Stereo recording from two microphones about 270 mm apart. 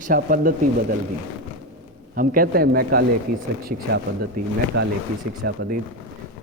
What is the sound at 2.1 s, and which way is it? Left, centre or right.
Speech, right.